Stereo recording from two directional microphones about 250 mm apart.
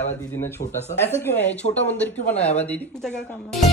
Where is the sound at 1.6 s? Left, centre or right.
Left.